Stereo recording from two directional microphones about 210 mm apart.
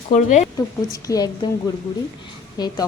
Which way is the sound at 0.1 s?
35° left (ahead or behind).